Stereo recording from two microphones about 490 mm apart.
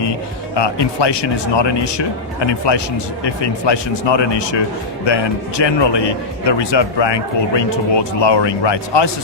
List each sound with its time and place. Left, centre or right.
0.5 s speech: left